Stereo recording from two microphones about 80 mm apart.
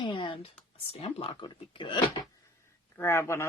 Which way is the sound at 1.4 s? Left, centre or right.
Left.